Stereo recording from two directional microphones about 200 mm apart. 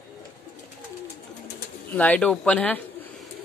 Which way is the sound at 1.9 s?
5° left (ahead or behind).